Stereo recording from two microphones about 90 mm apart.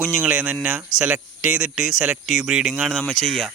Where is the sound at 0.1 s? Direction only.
10° right (ahead or behind).